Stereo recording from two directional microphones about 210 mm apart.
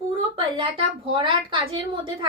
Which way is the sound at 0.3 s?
25° right (ahead or behind).